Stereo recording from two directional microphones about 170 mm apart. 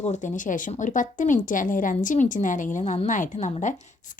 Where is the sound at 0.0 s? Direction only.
45° left (ahead or behind).